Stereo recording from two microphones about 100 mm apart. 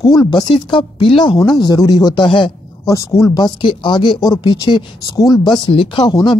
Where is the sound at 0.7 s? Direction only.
55° left (ahead or behind).